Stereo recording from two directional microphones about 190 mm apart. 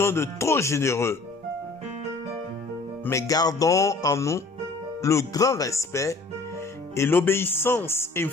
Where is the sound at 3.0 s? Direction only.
15° left (ahead or behind).